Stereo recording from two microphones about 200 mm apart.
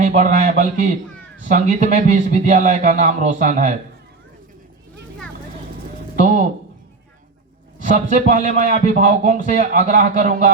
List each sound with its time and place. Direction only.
0.0 s a man's voice: 35° right (ahead or behind)
6.1 s a sound: 40° right (ahead or behind)
7.9 s a man's voice: 35° right (ahead or behind)